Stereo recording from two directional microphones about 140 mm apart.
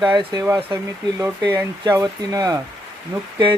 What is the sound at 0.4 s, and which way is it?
Speech, 15° right (ahead or behind).